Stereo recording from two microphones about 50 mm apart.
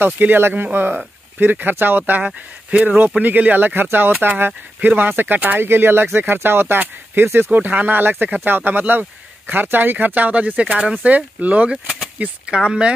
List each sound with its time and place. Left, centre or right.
0.0 s speech: right
5.6 s speech: right
7.5 s speech: right
10.6 s speech: right
12.4 s speech: centre